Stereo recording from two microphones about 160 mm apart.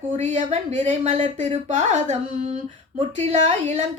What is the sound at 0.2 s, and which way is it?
Speech, 50° right (ahead or behind).